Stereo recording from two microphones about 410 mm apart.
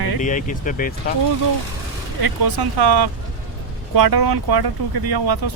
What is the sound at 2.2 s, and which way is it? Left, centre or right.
Speech, right.